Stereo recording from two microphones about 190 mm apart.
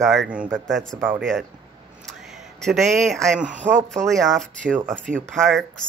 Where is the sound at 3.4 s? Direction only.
40° right (ahead or behind).